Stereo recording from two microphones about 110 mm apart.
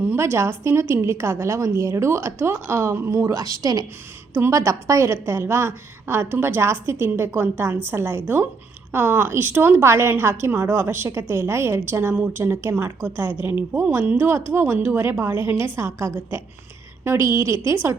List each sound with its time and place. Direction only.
0.0 s a woman's voice: 20° right (ahead or behind)